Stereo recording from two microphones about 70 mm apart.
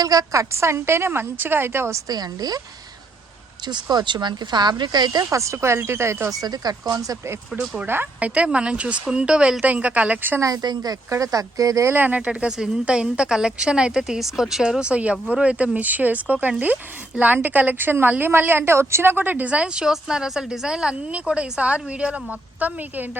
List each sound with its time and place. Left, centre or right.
0.0 s a woman's voice: right
2.0 s speech: right
3.7 s speech: right
5.4 s a woman's voice: right
6.3 s speech: right
6.9 s speech: right
8.2 s a woman's voice: centre
10.4 s speech: right
11.1 s speech: right
11.9 s a woman's voice: right